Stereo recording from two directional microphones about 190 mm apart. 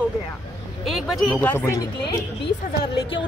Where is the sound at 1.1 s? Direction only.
Centre (ahead or behind).